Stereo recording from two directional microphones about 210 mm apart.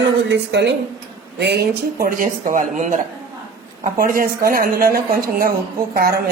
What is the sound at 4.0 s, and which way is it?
A woman's voice, 45° right (ahead or behind).